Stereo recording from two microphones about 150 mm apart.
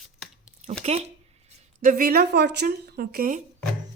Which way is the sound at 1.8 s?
65° right (ahead or behind).